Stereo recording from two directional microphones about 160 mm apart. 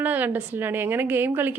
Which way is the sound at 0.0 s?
10° right (ahead or behind).